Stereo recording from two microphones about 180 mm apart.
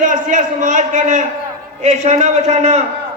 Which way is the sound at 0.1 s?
45° right (ahead or behind).